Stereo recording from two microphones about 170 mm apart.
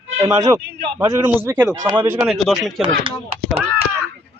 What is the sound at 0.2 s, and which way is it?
Speech, 20° right (ahead or behind).